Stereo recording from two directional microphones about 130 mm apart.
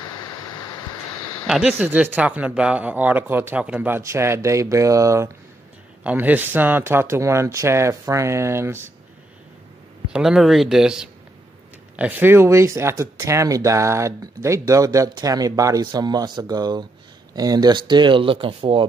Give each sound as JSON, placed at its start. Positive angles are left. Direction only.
{"t": 1.5, "sound": "speech", "side_deg": -5}
{"t": 6.0, "sound": "speech", "side_deg": -15}
{"t": 10.0, "sound": "speech", "side_deg": -5}